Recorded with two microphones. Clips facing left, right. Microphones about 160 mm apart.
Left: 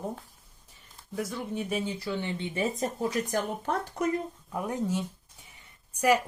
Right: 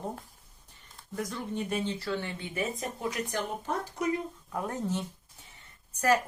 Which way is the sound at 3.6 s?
55° left (ahead or behind).